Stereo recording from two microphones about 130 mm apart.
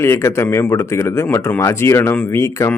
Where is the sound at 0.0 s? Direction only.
20° left (ahead or behind).